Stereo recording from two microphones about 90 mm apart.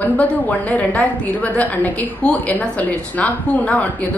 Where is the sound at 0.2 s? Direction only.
15° left (ahead or behind).